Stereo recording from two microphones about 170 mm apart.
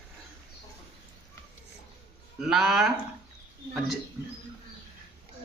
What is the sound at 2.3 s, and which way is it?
Speech, centre (ahead or behind).